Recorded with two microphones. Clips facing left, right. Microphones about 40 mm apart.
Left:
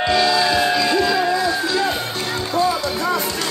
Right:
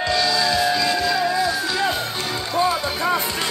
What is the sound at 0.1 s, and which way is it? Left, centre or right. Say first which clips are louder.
Music: left 3 dB; left.